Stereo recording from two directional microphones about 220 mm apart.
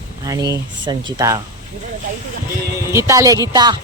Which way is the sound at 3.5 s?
20° right (ahead or behind).